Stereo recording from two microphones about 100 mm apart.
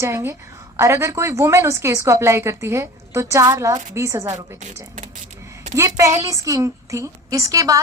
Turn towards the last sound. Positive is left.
turn(degrees=-35)  # may be behind; listen again after turning